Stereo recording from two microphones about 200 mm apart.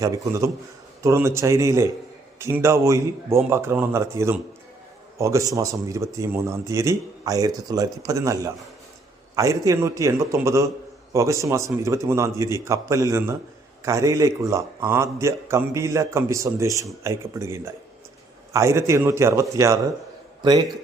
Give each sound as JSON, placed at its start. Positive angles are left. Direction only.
{"t": 0.0, "sound": "a man's voice", "side_deg": -15}